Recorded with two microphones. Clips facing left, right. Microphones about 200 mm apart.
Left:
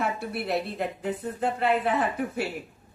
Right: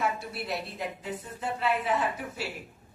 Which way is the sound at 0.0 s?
60° left (ahead or behind).